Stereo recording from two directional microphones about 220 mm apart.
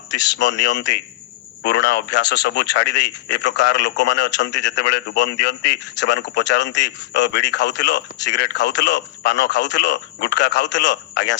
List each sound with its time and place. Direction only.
0.2 s speech: 55° left (ahead or behind)